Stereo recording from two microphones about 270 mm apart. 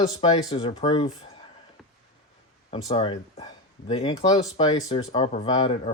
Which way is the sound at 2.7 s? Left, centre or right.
Left.